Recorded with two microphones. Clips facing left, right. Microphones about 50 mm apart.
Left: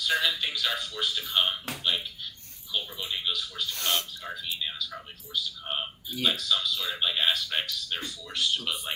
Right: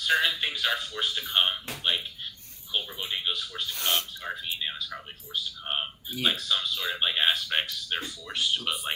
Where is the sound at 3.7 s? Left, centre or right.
Centre.